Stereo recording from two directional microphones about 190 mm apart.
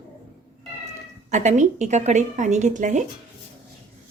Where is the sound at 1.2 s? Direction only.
40° right (ahead or behind).